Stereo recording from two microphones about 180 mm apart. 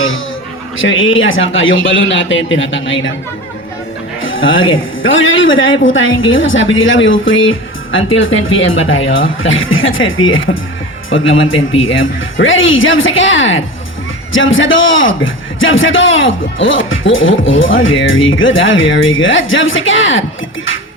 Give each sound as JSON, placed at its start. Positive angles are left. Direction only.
{"t": 0.8, "sound": "a man's voice", "side_deg": 90}
{"t": 4.2, "sound": "a man's voice", "side_deg": 90}